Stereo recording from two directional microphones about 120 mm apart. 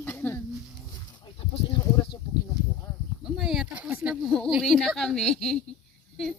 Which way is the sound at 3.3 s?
5° right (ahead or behind).